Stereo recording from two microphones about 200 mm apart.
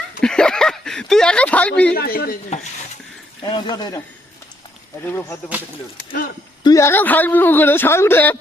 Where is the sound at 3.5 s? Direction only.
20° left (ahead or behind).